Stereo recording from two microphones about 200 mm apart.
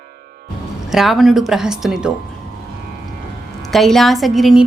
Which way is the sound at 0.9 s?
Centre (ahead or behind).